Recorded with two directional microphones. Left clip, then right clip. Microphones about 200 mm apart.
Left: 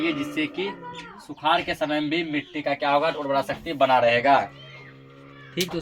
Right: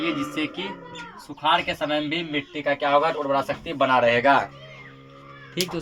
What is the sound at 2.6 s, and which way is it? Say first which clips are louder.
Speech: right 2 dB; 30° right (ahead or behind).